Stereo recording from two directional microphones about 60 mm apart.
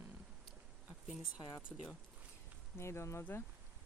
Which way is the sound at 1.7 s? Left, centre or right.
Centre.